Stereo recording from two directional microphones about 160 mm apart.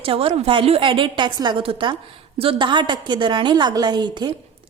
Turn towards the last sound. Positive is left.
turn(degrees=-25)  # may be behind; listen again after turning